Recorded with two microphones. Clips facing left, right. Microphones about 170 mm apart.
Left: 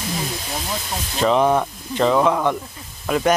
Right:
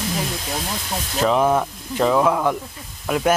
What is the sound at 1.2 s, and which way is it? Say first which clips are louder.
Speech: left 1 dB; 5° right (ahead or behind).